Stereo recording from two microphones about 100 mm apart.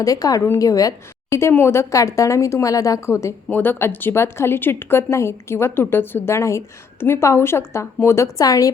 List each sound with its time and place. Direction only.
0.0 s a woman's voice: 35° left (ahead or behind)